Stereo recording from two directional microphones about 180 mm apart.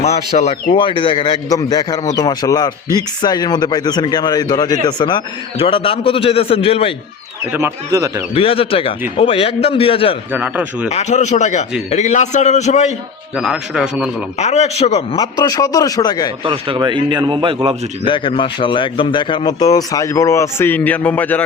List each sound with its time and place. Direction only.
0.0 s speech: 35° left (ahead or behind)
7.5 s speech: 15° right (ahead or behind)
8.3 s a man's voice: 30° left (ahead or behind)
10.3 s speech: 10° right (ahead or behind)
10.8 s a man's voice: 40° left (ahead or behind)
13.3 s a man's voice: 5° right (ahead or behind)
14.3 s a man's voice: 40° left (ahead or behind)
15.1 s speech: 20° left (ahead or behind)
16.4 s a man's voice: 30° right (ahead or behind)
18.0 s speech: 30° left (ahead or behind); by 21.4 s 10° left (ahead or behind)